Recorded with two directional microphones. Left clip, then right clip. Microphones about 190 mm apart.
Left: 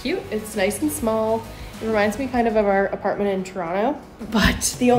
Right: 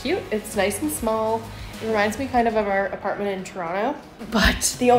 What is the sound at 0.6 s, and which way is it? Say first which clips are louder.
Speech: left 2 dB; 5° left (ahead or behind).